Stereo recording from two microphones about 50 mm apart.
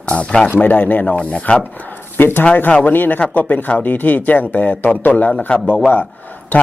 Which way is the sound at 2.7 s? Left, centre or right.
Left.